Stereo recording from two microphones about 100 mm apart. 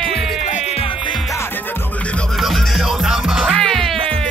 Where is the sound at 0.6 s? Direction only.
80° left.